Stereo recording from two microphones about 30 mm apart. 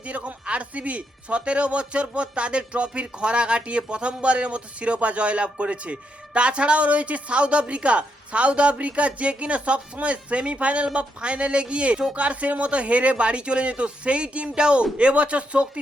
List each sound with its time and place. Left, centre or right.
0.0 s speech: right
12.1 s speech: right